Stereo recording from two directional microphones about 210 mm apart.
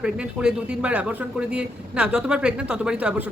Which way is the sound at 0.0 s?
5° right (ahead or behind).